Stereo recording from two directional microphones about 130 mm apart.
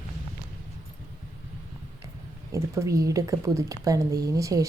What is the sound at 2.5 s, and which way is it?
Speech, 25° right (ahead or behind).